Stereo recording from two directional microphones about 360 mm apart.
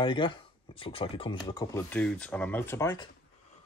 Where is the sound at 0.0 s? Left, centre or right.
Centre.